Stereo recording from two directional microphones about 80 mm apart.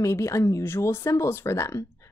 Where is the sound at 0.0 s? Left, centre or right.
Left.